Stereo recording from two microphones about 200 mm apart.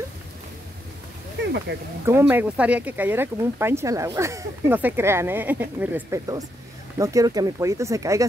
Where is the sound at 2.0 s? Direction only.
10° right (ahead or behind).